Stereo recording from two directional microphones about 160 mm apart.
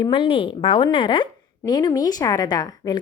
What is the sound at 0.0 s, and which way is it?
A woman's voice, 30° left (ahead or behind).